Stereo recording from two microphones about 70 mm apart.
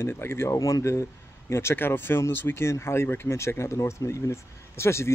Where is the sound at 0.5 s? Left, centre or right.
Left.